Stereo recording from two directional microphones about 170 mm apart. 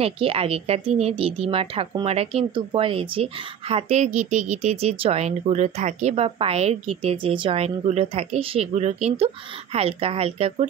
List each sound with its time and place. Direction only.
0.0 s speech: 35° right (ahead or behind)